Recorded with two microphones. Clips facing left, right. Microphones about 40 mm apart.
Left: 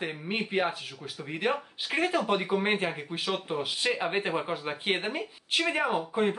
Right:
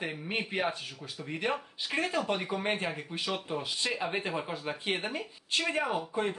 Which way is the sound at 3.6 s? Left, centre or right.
Left.